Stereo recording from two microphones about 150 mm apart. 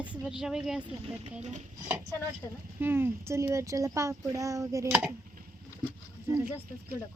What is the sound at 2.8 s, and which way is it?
Speech, 15° right (ahead or behind).